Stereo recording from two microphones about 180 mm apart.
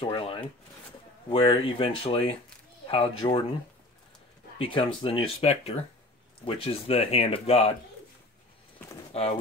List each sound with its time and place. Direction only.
0.0 s speech: 30° left (ahead or behind)
4.6 s speech: 30° left (ahead or behind)